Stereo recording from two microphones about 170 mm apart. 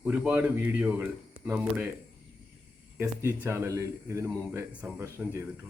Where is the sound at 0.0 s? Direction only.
5° right (ahead or behind).